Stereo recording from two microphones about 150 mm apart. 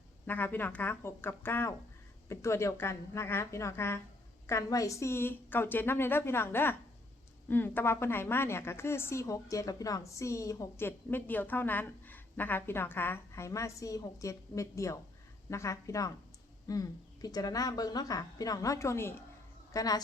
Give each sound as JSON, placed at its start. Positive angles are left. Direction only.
{"t": 0.3, "sound": "a woman's voice", "side_deg": 15}